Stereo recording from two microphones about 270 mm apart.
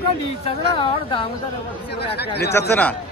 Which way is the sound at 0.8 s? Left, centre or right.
Centre.